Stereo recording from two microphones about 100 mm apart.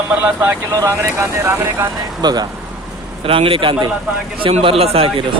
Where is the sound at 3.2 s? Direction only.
65° right (ahead or behind).